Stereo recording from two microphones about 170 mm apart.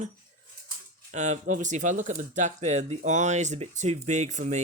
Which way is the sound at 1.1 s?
45° right (ahead or behind).